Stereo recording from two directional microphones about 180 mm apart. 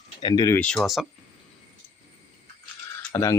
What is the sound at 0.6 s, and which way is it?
Speech, 5° left (ahead or behind).